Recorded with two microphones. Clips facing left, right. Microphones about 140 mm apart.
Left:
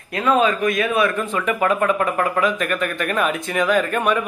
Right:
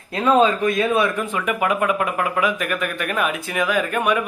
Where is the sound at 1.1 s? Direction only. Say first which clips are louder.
Left 1 dB; 10° right (ahead or behind).